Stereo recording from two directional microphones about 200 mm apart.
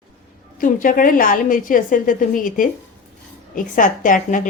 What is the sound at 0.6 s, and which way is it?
A woman's voice, 45° left (ahead or behind).